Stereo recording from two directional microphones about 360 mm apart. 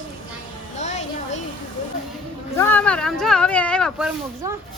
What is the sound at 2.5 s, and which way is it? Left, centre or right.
Speech, centre.